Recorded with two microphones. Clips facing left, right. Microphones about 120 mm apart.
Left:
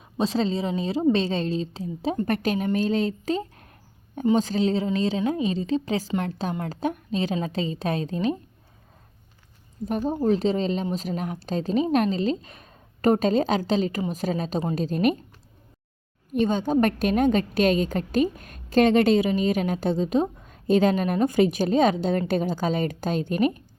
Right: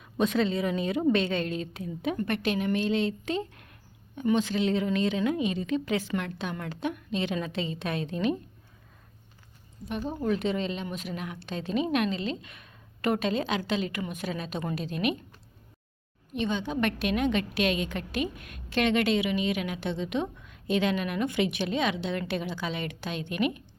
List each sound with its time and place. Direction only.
0.0 s a woman's voice: 30° left (ahead or behind)
3.2 s a sound: 35° left (ahead or behind)
4.4 s a woman's voice: 40° left (ahead or behind)
9.8 s a woman's voice: 40° left (ahead or behind)
16.3 s a woman's voice: 45° left (ahead or behind)